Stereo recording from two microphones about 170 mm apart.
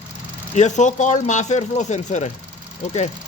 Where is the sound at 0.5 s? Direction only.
45° left (ahead or behind).